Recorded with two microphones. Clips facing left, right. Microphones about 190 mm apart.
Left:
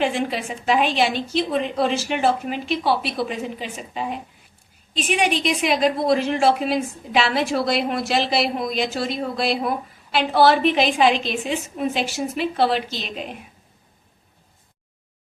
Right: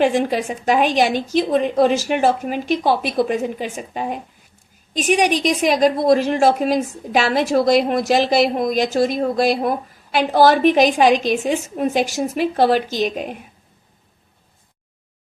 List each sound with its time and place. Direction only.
0.0 s a woman's voice: 45° right (ahead or behind)